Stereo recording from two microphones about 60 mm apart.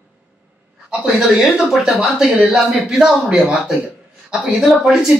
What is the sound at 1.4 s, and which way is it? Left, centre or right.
Speech, centre.